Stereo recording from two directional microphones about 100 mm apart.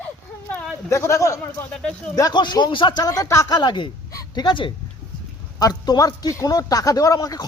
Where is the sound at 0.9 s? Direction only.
30° left (ahead or behind).